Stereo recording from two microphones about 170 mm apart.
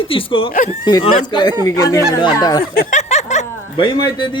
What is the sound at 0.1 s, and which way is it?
A man's voice, 30° left (ahead or behind).